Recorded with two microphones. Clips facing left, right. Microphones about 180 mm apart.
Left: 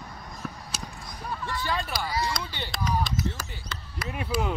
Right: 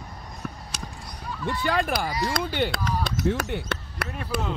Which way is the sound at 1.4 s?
60° right (ahead or behind).